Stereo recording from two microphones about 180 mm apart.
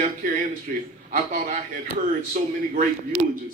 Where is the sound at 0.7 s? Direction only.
45° right (ahead or behind).